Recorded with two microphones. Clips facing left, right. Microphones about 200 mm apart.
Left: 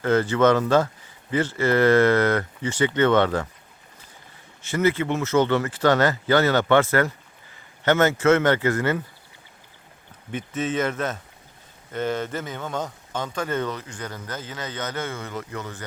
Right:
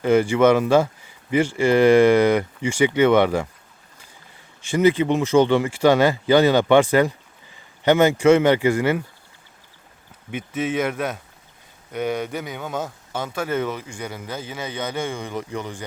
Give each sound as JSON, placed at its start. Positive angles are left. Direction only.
{"t": 0.0, "sound": "a man's voice", "side_deg": -10}
{"t": 4.6, "sound": "a man's voice", "side_deg": -15}
{"t": 10.3, "sound": "a man's voice", "side_deg": -10}
{"t": 12.3, "sound": "a man's voice", "side_deg": 0}